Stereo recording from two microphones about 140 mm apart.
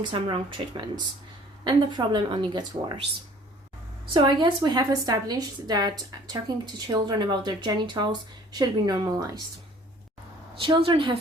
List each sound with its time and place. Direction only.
0.0 s a woman's voice: 35° right (ahead or behind)
4.0 s a woman's voice: 35° right (ahead or behind)
10.6 s a woman's voice: 40° right (ahead or behind)